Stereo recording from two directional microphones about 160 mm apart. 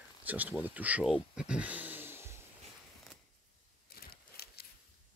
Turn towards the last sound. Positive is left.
turn(degrees=75)  # may be behind; listen again after turning